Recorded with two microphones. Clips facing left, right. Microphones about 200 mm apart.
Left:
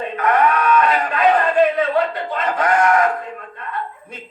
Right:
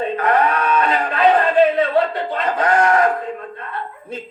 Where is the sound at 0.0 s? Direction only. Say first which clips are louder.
Even; 30° right (ahead or behind).